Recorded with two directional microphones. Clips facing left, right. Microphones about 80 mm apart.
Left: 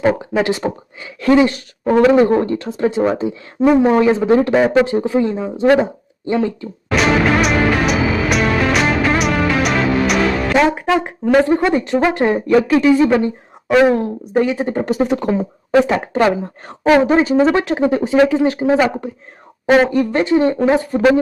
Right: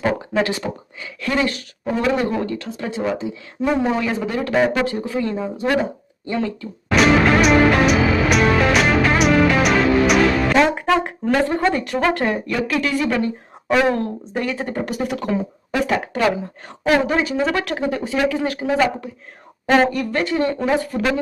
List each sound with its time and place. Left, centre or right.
0.4 s speech: left
1.9 s speech: left
2.1 s speech: left
4.0 s speech: left
4.4 s speech: centre
6.9 s music: centre; by 12.5 s left
12.6 s a woman's voice: left
19.6 s speech: centre
19.9 s speech: left